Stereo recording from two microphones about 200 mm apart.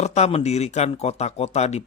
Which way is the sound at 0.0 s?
35° left (ahead or behind).